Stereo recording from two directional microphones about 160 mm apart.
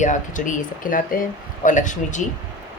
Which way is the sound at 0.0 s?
50° left (ahead or behind).